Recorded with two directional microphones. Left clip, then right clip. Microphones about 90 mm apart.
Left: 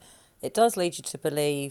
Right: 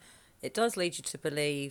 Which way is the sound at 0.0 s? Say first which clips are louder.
Left 6 dB; 30° left (ahead or behind).